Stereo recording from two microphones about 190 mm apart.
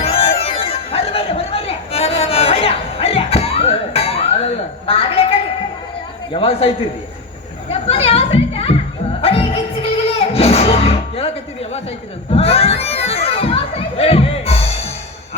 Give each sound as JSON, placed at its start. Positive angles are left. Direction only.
{"t": 0.0, "sound": "chatter", "side_deg": 30}
{"t": 4.9, "sound": "a sound", "side_deg": 30}
{"t": 6.3, "sound": "a man's voice", "side_deg": 30}
{"t": 7.7, "sound": "children playing", "side_deg": 30}
{"t": 9.2, "sound": "music", "side_deg": 30}